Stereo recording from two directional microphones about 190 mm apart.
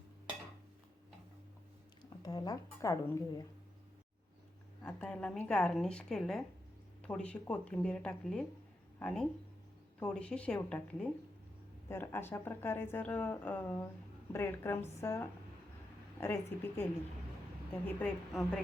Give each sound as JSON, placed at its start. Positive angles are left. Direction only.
{"t": 2.0, "sound": "a woman's voice", "side_deg": 20}
{"t": 4.8, "sound": "speech", "side_deg": 5}